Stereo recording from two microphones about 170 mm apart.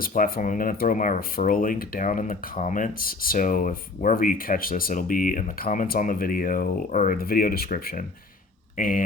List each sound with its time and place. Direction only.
0.0 s speech: 55° left (ahead or behind)